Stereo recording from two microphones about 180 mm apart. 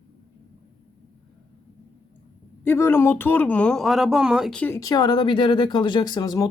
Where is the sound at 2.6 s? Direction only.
10° left (ahead or behind).